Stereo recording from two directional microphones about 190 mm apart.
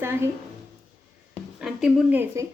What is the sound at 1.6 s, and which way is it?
Speech, 5° right (ahead or behind).